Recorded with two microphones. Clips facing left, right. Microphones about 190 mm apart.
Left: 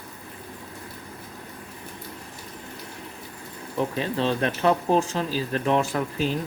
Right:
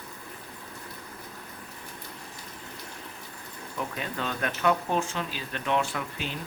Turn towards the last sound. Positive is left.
turn(degrees=40)  # may be behind; listen again after turning